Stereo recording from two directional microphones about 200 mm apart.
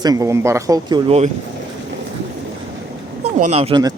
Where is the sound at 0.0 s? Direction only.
15° right (ahead or behind).